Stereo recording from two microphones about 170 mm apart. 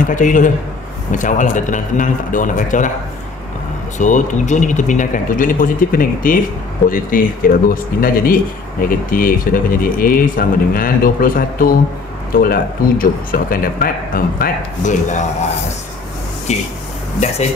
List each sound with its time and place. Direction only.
0.0 s speech: 50° left (ahead or behind)
4.0 s speech: 45° left (ahead or behind)
16.5 s speech: 40° left (ahead or behind)